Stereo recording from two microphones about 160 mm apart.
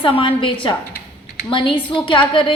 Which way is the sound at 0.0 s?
35° left (ahead or behind).